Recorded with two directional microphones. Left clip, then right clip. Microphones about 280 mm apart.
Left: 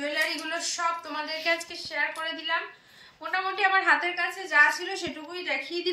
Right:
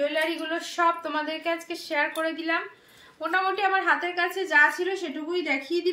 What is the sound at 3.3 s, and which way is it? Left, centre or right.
A woman's voice, right.